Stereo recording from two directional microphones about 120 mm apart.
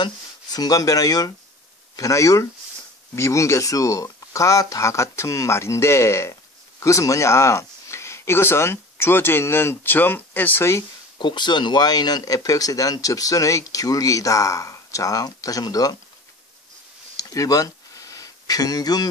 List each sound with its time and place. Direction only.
0.0 s speech: 30° left (ahead or behind)
11.1 s speech: 40° left (ahead or behind)
17.2 s a sound: 30° left (ahead or behind)